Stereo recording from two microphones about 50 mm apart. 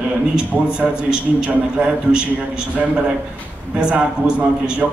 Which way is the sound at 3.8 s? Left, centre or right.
Centre.